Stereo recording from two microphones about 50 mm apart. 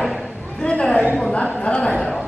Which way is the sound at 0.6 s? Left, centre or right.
Centre.